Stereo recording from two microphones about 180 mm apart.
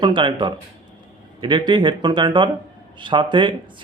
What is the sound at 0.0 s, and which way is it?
A man's voice, 25° right (ahead or behind).